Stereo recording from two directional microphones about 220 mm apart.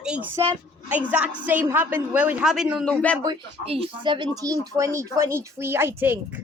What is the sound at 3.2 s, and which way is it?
A woman's voice, 25° right (ahead or behind).